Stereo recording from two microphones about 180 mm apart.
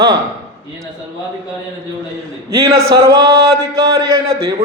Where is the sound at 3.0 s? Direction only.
15° right (ahead or behind).